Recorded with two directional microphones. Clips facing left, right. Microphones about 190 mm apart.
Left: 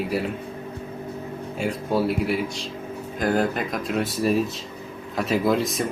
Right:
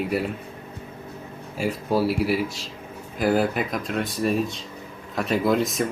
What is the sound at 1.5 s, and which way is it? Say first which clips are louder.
Speech: right 1 dB; centre (ahead or behind).